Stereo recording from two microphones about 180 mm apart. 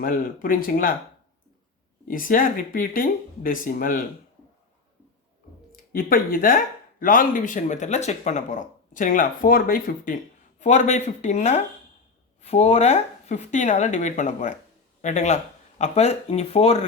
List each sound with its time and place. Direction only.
0.0 s speech: 50° left (ahead or behind)
2.0 s speech: 50° left (ahead or behind)
5.7 s speech: 55° left (ahead or behind); by 16.8 s 35° left (ahead or behind)